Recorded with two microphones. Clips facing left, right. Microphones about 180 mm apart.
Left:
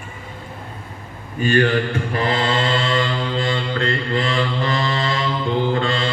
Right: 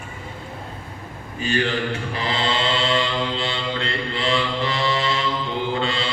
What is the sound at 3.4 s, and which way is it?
Mantra, 45° left (ahead or behind).